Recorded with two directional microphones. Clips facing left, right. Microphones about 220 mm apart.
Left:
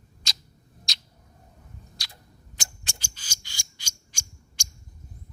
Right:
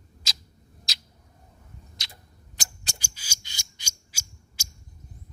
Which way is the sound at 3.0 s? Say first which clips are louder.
Even; 10° right (ahead or behind).